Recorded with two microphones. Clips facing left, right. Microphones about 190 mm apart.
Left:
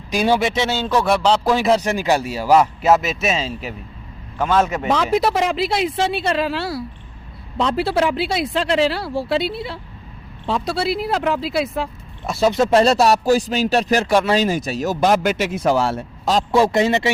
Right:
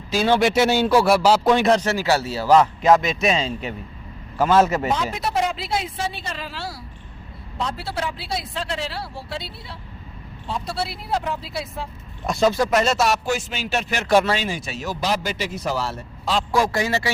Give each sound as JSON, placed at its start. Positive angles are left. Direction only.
{"t": 0.1, "sound": "speech", "side_deg": 15}
{"t": 0.3, "sound": "speech", "side_deg": -5}
{"t": 1.8, "sound": "a man's voice", "side_deg": 15}
{"t": 5.1, "sound": "speech", "side_deg": 90}
{"t": 7.6, "sound": "speech", "side_deg": 90}
{"t": 10.4, "sound": "speech", "side_deg": 90}
{"t": 12.2, "sound": "a man's voice", "side_deg": 0}
{"t": 12.5, "sound": "speech", "side_deg": 25}
{"t": 16.5, "sound": "a man's voice", "side_deg": 25}